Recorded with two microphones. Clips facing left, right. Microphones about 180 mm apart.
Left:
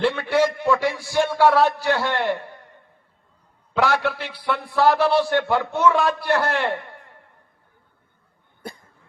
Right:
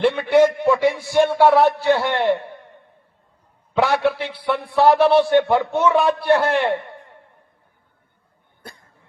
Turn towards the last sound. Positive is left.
turn(degrees=-20)  # may be behind; listen again after turning